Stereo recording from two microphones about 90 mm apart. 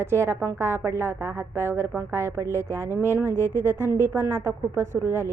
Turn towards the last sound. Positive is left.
turn(degrees=-25)  # may be behind; listen again after turning